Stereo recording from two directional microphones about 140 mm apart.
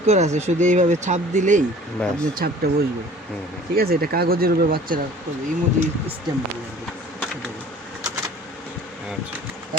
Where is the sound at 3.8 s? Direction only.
90° right.